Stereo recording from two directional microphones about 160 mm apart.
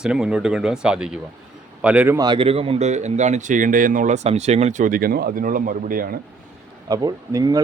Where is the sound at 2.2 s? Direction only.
30° right (ahead or behind); by 6.1 s 65° right (ahead or behind).